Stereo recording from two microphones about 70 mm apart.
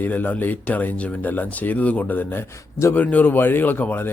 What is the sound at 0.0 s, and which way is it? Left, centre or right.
Speech, left.